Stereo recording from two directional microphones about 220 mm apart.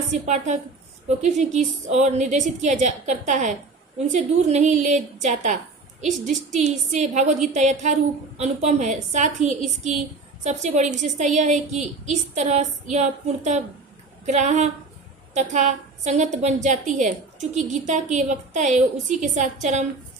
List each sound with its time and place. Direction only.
0.1 s a woman's voice: 30° right (ahead or behind)